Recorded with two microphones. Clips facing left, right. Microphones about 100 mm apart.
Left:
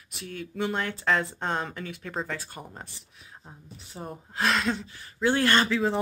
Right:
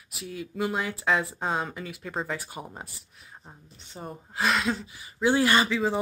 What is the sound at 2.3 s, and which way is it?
Speech, 15° right (ahead or behind).